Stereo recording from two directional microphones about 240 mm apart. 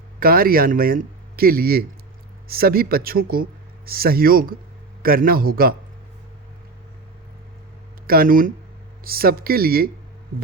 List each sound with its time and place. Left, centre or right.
0.2 s speech: right
8.0 s speech: right